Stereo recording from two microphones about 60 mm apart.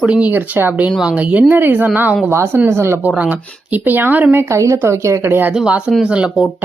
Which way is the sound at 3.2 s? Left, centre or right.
Right.